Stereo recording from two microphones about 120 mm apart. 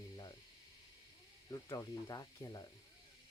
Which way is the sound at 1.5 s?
30° left (ahead or behind).